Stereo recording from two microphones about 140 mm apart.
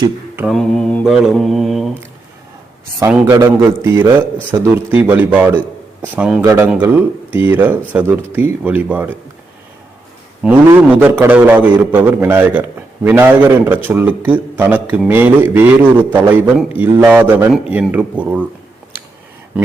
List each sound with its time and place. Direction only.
0.4 s mantra: 5° left (ahead or behind)
3.3 s a man's voice: 20° right (ahead or behind)
6.4 s a man's voice: 20° right (ahead or behind)
6.7 s a man's voice: 10° right (ahead or behind)
10.4 s a man's voice: 10° right (ahead or behind)